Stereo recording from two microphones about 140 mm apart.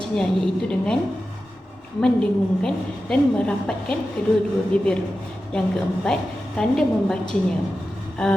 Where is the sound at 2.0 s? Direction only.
5° left (ahead or behind).